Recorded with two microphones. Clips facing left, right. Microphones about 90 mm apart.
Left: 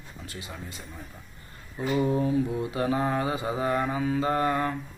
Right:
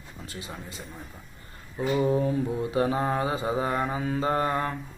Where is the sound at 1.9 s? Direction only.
25° right (ahead or behind).